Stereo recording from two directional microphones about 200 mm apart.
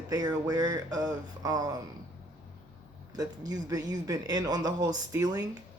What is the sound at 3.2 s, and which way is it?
Speech, 20° right (ahead or behind).